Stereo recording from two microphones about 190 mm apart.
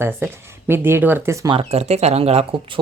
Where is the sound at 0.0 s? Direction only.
15° right (ahead or behind).